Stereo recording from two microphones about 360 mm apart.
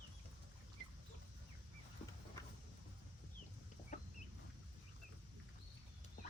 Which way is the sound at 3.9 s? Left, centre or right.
Centre.